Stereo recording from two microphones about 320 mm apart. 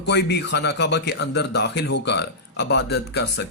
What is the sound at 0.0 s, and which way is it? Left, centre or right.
A man's voice, left.